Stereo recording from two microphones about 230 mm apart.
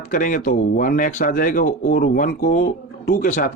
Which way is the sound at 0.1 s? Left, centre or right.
Left.